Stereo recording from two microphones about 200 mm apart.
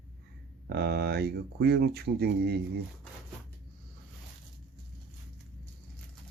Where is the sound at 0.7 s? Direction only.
55° right (ahead or behind).